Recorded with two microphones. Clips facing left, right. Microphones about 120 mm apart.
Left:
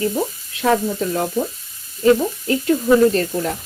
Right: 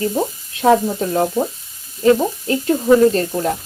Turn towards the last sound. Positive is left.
turn(degrees=-30)  # may be behind; listen again after turning